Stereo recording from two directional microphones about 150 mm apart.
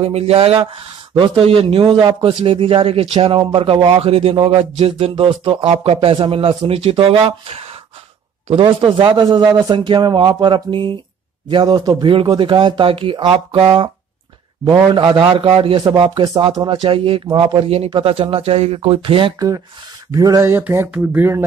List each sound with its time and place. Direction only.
0.0 s speech: 40° right (ahead or behind)
15.0 s speech: 35° right (ahead or behind)
20.1 s speech: 20° right (ahead or behind)